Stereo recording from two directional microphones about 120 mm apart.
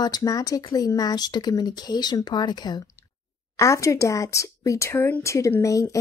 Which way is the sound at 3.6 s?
25° left (ahead or behind).